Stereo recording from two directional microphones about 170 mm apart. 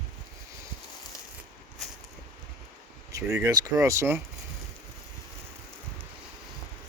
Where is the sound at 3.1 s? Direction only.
20° right (ahead or behind).